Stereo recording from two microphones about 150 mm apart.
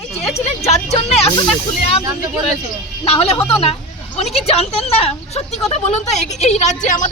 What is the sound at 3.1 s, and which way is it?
A woman's voice, 40° left (ahead or behind).